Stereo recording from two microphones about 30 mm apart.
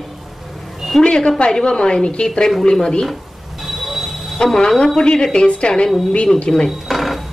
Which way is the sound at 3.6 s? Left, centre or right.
Centre.